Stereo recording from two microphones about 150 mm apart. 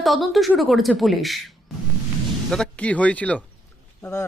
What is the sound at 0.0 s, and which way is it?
A woman's voice, centre (ahead or behind).